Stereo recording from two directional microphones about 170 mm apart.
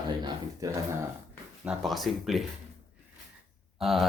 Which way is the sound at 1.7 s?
Centre (ahead or behind).